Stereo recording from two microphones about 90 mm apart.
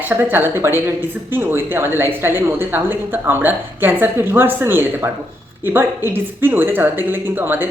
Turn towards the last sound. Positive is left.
turn(degrees=-20)  # may be behind; listen again after turning